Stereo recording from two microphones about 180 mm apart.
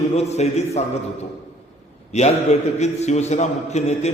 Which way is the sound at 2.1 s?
40° left (ahead or behind).